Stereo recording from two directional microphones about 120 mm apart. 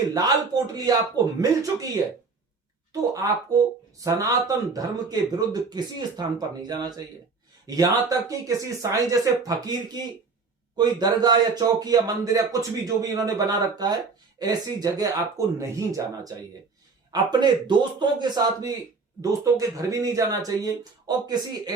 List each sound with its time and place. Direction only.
0.1 s a man's voice: 30° right (ahead or behind)
2.9 s a man's voice: 30° right (ahead or behind)
17.4 s a man's voice: 40° right (ahead or behind)